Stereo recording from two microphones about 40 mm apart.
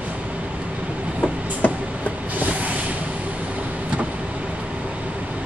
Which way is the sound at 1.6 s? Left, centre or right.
Left.